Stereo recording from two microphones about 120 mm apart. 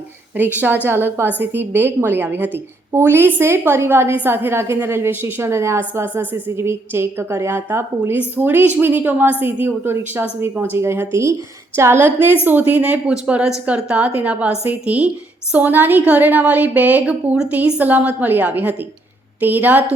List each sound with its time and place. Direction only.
0.3 s a woman's voice: 15° right (ahead or behind)